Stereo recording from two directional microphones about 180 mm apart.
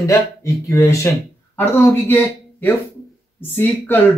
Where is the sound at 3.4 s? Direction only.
10° left (ahead or behind).